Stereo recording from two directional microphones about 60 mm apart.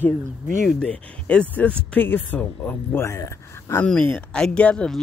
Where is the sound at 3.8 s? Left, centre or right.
Centre.